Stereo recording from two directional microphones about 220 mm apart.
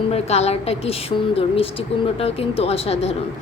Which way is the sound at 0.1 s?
30° left (ahead or behind).